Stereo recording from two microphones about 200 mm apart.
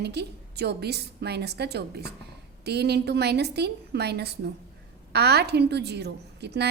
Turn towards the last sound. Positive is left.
turn(degrees=-55)  # may be behind; listen again after turning